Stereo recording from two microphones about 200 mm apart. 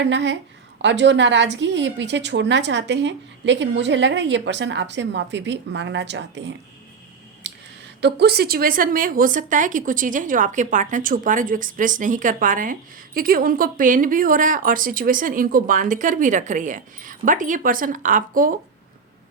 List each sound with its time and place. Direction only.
0.0 s a woman's voice: 65° right (ahead or behind)
8.0 s a woman's voice: 55° right (ahead or behind)